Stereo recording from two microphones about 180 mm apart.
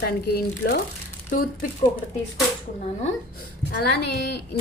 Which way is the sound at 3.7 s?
65° left (ahead or behind).